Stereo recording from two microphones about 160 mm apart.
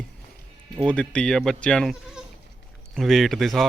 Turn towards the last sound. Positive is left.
turn(degrees=0)  # may be behind; listen again after turning